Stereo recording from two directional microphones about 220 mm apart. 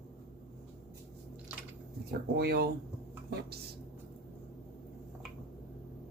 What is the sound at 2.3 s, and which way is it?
Speech, 45° right (ahead or behind).